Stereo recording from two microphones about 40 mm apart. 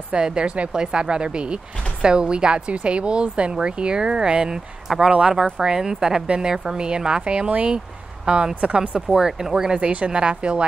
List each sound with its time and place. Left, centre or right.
0.1 s a woman's voice: right
7.4 s speech: right
9.1 s a woman's voice: centre
9.8 s speech: right